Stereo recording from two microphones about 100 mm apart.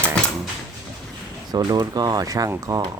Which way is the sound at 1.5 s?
40° right (ahead or behind).